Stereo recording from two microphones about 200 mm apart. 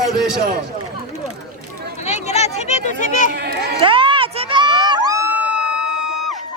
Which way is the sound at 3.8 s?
25° right (ahead or behind).